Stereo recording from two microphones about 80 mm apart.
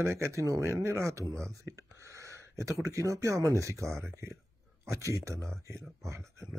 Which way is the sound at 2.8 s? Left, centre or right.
Right.